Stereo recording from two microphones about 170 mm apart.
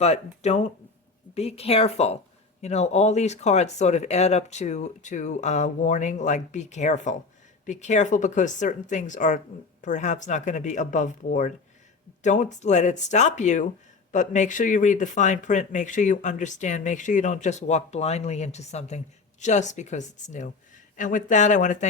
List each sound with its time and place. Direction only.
0.0 s a woman's voice: 40° left (ahead or behind)